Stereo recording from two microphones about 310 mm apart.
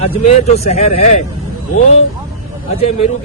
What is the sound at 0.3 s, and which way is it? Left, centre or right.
Speech, centre.